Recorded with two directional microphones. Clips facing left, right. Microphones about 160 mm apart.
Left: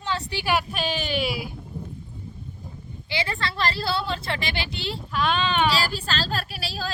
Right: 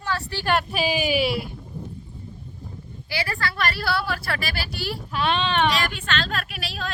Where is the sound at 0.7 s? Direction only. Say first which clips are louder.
Right 4 dB; 10° right (ahead or behind).